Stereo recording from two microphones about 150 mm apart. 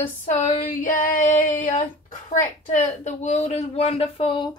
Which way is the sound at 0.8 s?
65° left (ahead or behind).